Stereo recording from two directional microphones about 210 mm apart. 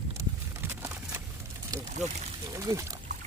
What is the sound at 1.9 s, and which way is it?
Speech, 35° right (ahead or behind).